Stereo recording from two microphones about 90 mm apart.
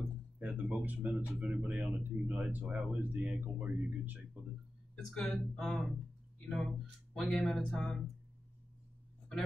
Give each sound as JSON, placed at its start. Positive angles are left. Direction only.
{"t": 0.4, "sound": "a sound", "side_deg": -15}
{"t": 1.4, "sound": "speech", "side_deg": -15}
{"t": 4.9, "sound": "speech", "side_deg": 5}